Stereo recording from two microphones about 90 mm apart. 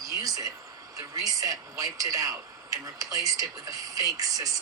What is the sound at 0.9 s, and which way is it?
Speech, 40° right (ahead or behind).